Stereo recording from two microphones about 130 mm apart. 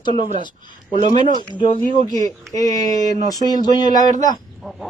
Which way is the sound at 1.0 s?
70° right (ahead or behind).